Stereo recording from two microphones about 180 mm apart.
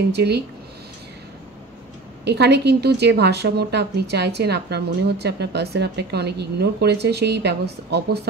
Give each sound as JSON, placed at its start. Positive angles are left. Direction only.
{"t": 0.1, "sound": "a woman's voice", "side_deg": -65}
{"t": 2.2, "sound": "a woman's voice", "side_deg": -70}